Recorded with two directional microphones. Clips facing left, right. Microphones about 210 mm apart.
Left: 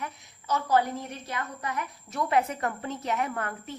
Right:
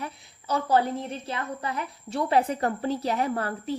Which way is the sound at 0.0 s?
30° right (ahead or behind).